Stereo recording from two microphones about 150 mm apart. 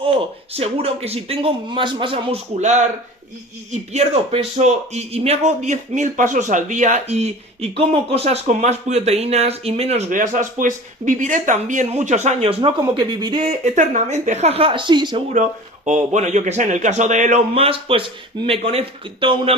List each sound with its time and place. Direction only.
0.0 s a man's voice: 40° right (ahead or behind)
10.1 s speech: 60° right (ahead or behind); by 12.7 s 40° right (ahead or behind)
12.9 s a man's voice: 30° right (ahead or behind)
13.7 s a man's voice: 55° right (ahead or behind); by 15.2 s 30° right (ahead or behind)
15.9 s speech: 55° right (ahead or behind)
17.5 s a man's voice: 40° right (ahead or behind)